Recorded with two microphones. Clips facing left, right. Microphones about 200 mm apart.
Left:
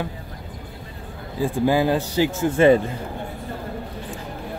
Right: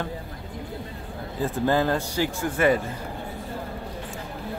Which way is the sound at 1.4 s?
10° left (ahead or behind).